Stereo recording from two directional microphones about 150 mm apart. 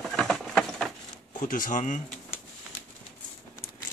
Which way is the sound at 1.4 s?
65° left (ahead or behind).